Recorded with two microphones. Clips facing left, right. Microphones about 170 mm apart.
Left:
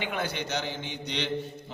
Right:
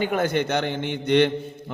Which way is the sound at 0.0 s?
45° right (ahead or behind).